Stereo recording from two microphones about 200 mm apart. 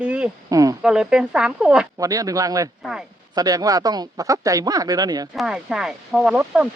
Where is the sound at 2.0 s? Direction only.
15° right (ahead or behind).